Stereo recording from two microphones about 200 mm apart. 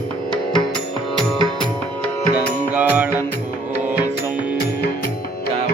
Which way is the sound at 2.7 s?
10° right (ahead or behind).